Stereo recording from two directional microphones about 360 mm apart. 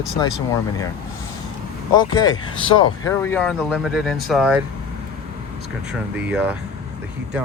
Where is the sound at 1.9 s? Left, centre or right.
Centre.